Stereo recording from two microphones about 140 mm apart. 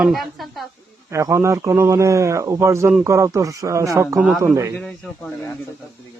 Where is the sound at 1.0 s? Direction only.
20° right (ahead or behind).